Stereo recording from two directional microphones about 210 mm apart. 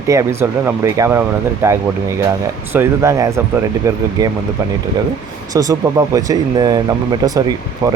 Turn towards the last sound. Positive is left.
turn(degrees=-20)  # may be behind; listen again after turning